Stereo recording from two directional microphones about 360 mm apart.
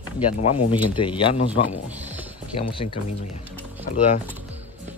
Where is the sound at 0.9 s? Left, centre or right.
Centre.